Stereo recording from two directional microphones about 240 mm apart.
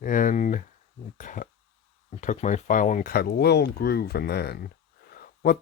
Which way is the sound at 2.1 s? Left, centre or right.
Left.